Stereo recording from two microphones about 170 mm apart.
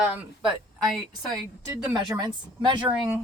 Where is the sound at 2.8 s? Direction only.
5° right (ahead or behind).